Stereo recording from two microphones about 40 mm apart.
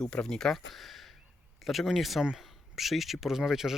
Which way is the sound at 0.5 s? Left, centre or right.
Centre.